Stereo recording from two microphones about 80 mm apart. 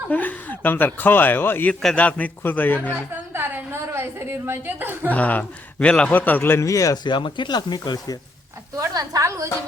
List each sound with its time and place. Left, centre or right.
0.1 s speech: centre
2.9 s a woman's voice: right
5.1 s a man's voice: centre; by 8.1 s left
8.9 s a sound: right